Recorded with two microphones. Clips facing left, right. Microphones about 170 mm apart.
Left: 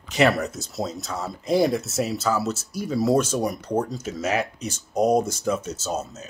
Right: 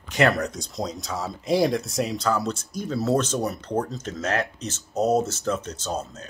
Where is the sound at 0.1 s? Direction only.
5° left (ahead or behind).